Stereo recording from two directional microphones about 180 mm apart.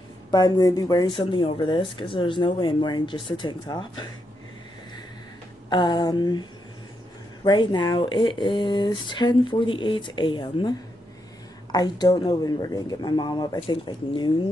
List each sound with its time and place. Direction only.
0.3 s speech: 20° left (ahead or behind)
5.7 s speech: 25° left (ahead or behind)
7.4 s speech: 25° left (ahead or behind)
11.7 s speech: 20° left (ahead or behind)